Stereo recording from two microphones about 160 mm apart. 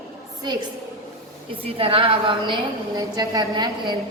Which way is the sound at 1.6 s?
35° right (ahead or behind).